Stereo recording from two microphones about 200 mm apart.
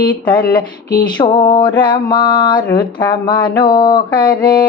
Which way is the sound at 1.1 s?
20° left (ahead or behind).